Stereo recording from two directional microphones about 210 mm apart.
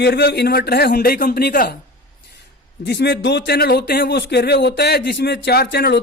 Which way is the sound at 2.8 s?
55° left (ahead or behind).